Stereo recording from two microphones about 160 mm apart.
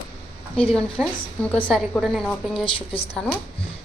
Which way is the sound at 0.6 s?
5° left (ahead or behind).